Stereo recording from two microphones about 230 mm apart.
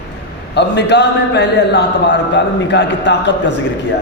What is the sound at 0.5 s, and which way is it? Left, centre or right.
A man's voice, left.